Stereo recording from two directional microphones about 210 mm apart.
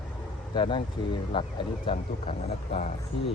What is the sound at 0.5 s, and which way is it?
Speech, 20° left (ahead or behind).